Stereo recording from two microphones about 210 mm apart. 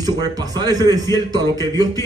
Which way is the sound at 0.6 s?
20° right (ahead or behind).